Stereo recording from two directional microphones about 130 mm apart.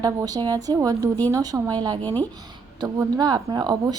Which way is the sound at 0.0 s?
30° right (ahead or behind).